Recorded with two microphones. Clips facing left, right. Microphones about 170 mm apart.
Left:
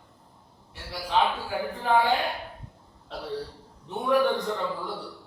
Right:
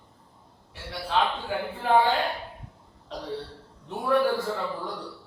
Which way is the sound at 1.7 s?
5° right (ahead or behind).